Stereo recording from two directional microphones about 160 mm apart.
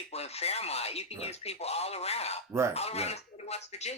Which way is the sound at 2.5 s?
15° right (ahead or behind).